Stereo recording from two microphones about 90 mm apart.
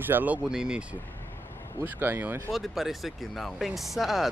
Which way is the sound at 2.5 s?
Centre (ahead or behind).